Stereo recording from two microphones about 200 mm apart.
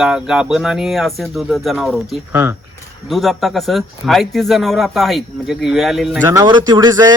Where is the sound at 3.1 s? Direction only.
Centre (ahead or behind).